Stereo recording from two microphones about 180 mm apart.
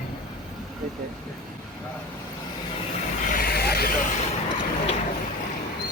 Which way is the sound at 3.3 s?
55° left (ahead or behind).